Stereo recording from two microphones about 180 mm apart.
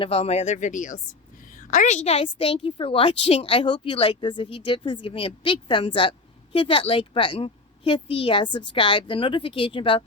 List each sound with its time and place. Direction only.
0.0 s a woman's voice: 35° left (ahead or behind)